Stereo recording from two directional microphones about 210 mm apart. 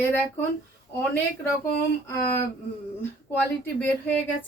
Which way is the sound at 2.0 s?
10° left (ahead or behind).